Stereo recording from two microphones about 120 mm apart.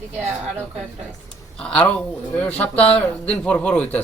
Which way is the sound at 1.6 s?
10° left (ahead or behind).